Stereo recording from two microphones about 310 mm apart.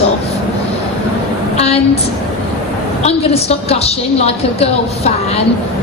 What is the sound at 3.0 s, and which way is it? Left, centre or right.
A woman's voice, centre.